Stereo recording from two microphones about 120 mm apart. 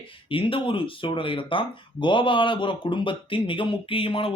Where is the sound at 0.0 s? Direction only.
45° left (ahead or behind).